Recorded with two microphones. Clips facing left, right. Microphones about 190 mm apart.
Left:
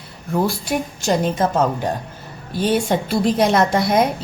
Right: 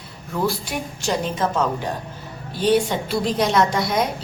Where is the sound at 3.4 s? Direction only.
50° left (ahead or behind).